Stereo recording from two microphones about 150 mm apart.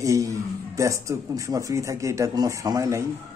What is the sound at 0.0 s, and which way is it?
A man's voice, 20° right (ahead or behind).